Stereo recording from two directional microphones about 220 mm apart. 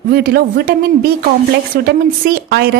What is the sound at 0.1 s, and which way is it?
A woman's voice, 45° right (ahead or behind).